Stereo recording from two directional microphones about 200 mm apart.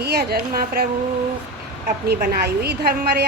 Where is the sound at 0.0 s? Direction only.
55° right (ahead or behind).